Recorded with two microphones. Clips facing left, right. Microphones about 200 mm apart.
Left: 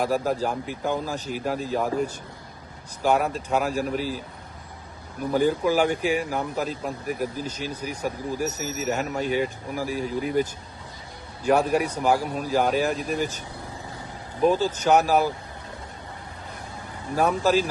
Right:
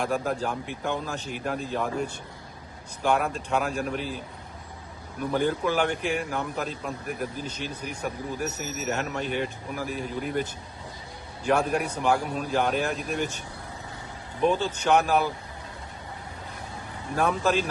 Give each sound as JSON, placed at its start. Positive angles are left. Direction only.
{"t": 0.0, "sound": "speech", "side_deg": 5}
{"t": 3.0, "sound": "speech", "side_deg": 5}
{"t": 5.3, "sound": "speech", "side_deg": 5}
{"t": 14.4, "sound": "speech", "side_deg": 5}
{"t": 17.2, "sound": "speech", "side_deg": 5}